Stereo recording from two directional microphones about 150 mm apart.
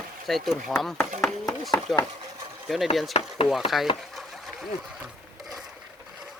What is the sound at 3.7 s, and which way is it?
Speech, centre (ahead or behind).